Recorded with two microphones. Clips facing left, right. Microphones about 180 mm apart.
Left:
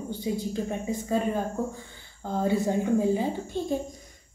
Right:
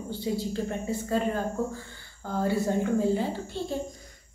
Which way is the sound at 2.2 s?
20° left (ahead or behind).